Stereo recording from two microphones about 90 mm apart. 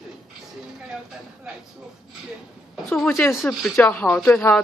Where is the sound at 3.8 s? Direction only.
20° left (ahead or behind).